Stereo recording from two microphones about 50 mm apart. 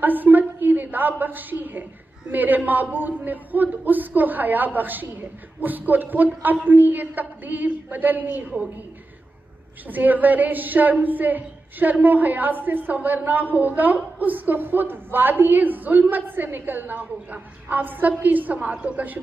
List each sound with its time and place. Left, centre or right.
0.0 s a sound: right
1.2 s a woman's voice: right
9.8 s a woman's voice: right